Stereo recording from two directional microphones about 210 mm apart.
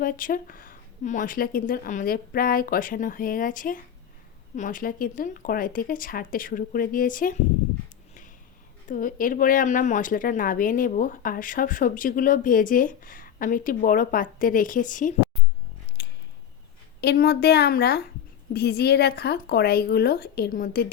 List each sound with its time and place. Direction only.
0.0 s speech: 40° left (ahead or behind)
8.9 s speech: 40° left (ahead or behind)
16.0 s a sound: 55° left (ahead or behind)
17.0 s speech: 50° left (ahead or behind)